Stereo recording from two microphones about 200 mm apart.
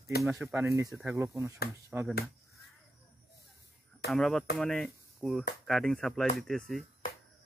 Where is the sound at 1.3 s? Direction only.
15° right (ahead or behind).